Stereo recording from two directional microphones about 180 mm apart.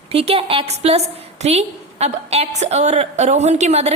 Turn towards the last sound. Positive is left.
turn(degrees=-40)  # may be behind; listen again after turning